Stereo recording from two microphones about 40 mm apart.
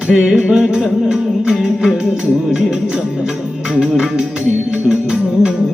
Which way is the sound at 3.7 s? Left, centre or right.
Right.